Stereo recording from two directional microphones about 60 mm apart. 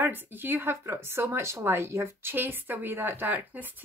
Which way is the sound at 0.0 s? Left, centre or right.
Right.